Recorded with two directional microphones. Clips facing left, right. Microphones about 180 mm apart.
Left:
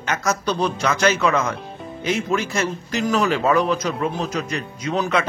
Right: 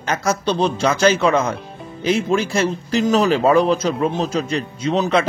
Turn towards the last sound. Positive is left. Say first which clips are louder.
# right 4 dB
turn(degrees=-25)  # may be behind; listen again after turning